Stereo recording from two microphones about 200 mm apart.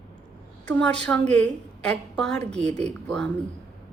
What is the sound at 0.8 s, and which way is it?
A woman's voice, 5° left (ahead or behind).